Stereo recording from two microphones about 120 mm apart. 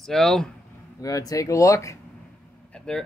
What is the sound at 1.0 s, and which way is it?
Speech, 30° left (ahead or behind).